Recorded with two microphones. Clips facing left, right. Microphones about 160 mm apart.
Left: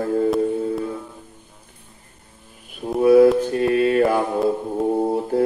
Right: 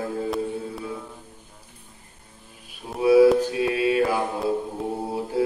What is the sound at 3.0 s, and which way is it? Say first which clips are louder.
Mantra: left 3 dB; 55° left (ahead or behind).